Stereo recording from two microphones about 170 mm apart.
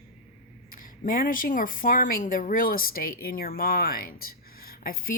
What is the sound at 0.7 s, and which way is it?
Speech, 55° left (ahead or behind).